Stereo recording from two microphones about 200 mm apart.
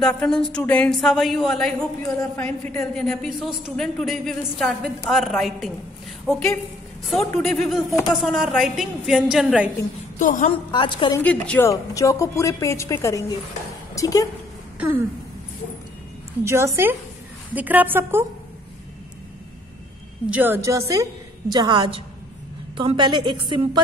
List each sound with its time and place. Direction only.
0.0 s a woman's voice: 5° left (ahead or behind)
2.0 s a woman's voice: 10° left (ahead or behind)
2.9 s a woman's voice: centre (ahead or behind)
10.1 s a woman's voice: 40° left (ahead or behind)
10.7 s a woman's voice: 25° left (ahead or behind)
11.1 s a woman's voice: 5° left (ahead or behind)
14.8 s a sound: 10° right (ahead or behind)
16.4 s a woman's voice: 15° right (ahead or behind)
20.2 s a woman's voice: 10° right (ahead or behind); by 23.8 s 25° right (ahead or behind)